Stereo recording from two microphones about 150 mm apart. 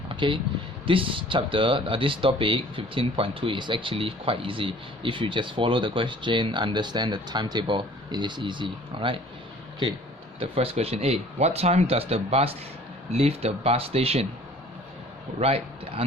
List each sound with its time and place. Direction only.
0.2 s speech: 35° right (ahead or behind)
10.4 s speech: 40° right (ahead or behind)
15.4 s a man's voice: 40° right (ahead or behind)